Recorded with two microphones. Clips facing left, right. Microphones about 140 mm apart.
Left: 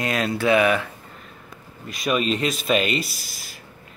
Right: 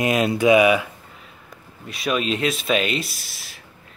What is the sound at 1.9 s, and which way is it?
Speech, centre (ahead or behind).